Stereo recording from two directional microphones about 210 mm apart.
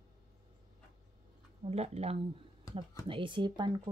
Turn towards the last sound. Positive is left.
turn(degrees=-20)  # may be behind; listen again after turning